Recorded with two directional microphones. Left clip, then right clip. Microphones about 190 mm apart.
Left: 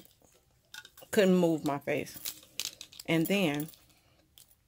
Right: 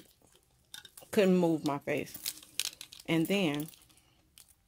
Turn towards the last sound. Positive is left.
turn(degrees=5)  # may be behind; listen again after turning